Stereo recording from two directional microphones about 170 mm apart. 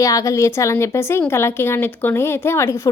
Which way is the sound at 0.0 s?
20° left (ahead or behind).